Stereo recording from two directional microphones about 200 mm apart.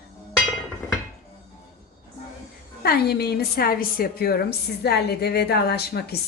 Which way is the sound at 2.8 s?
50° left (ahead or behind).